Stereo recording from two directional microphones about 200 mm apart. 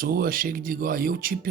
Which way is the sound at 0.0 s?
45° right (ahead or behind).